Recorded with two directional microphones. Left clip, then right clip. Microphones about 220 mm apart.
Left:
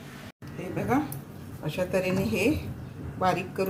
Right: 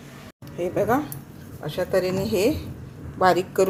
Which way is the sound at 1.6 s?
25° right (ahead or behind).